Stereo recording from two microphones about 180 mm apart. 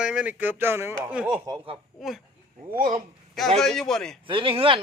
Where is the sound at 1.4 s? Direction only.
25° right (ahead or behind).